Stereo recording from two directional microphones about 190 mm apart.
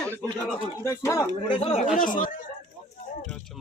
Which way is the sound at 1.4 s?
30° left (ahead or behind).